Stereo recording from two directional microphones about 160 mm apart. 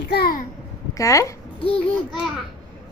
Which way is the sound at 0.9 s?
20° left (ahead or behind).